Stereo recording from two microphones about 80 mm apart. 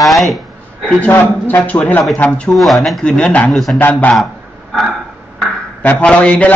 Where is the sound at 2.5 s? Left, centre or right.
Centre.